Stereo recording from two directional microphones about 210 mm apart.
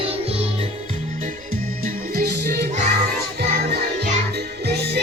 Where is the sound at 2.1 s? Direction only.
50° right (ahead or behind).